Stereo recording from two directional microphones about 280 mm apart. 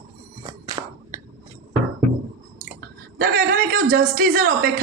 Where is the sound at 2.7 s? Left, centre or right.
Right.